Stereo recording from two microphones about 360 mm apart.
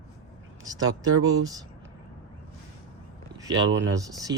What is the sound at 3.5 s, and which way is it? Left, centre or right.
Speech, right.